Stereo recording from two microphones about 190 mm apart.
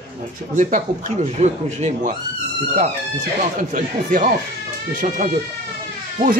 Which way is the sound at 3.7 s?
45° right (ahead or behind).